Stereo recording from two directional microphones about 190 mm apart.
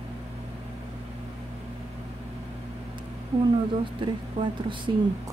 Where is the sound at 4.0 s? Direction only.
25° right (ahead or behind).